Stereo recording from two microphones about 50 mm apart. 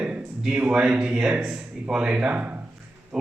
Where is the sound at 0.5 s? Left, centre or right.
Right.